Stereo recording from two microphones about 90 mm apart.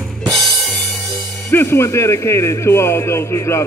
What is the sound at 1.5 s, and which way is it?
A man's voice, 25° left (ahead or behind).